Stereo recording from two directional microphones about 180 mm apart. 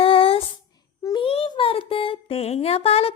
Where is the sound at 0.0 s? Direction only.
30° left (ahead or behind).